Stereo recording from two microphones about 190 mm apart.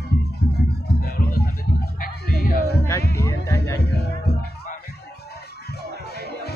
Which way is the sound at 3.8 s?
60° left (ahead or behind).